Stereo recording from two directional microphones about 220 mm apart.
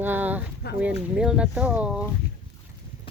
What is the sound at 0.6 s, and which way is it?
Speech, 50° left (ahead or behind).